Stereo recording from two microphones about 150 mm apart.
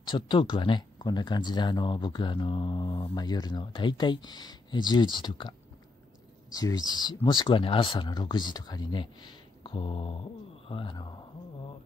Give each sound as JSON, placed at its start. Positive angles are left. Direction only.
{"t": 0.0, "sound": "speech", "side_deg": 30}